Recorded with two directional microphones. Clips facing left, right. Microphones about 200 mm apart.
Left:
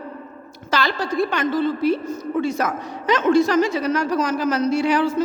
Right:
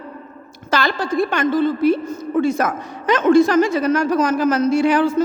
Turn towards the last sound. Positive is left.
turn(degrees=-50)  # may be behind; listen again after turning